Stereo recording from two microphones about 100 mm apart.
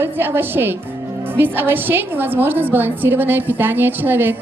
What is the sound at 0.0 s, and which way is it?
A woman's voice, 20° right (ahead or behind).